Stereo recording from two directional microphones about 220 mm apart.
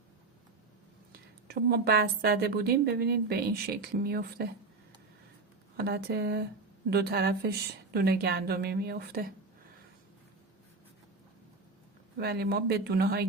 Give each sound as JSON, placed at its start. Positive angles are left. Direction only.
{"t": 1.5, "sound": "a woman's voice", "side_deg": -45}
{"t": 5.7, "sound": "a woman's voice", "side_deg": -45}
{"t": 12.2, "sound": "a woman's voice", "side_deg": -45}